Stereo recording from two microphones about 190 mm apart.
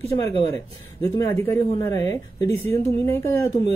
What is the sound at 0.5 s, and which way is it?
Speech, 15° left (ahead or behind).